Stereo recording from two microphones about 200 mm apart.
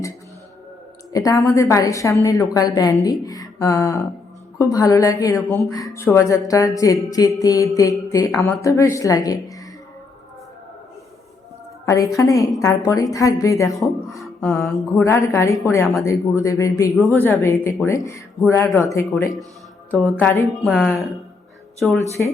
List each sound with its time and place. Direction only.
1.1 s speech: 15° left (ahead or behind)
11.9 s speech: 15° left (ahead or behind)
14.2 s music: centre (ahead or behind)
14.6 s speech: 15° left (ahead or behind)
19.9 s speech: 5° left (ahead or behind)
20.6 s a woman's voice: centre (ahead or behind)
22.2 s speech: 10° left (ahead or behind)